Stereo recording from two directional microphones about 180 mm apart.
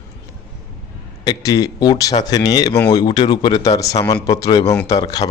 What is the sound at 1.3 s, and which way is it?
Speech, 20° left (ahead or behind).